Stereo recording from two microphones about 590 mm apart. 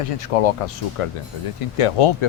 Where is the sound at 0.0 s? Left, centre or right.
Left.